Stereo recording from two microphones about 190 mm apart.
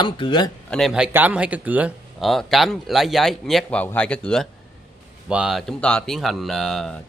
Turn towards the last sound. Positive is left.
turn(degrees=0)  # may be behind; listen again after turning